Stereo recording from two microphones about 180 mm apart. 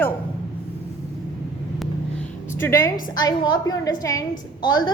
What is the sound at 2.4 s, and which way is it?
A woman's voice, 15° left (ahead or behind).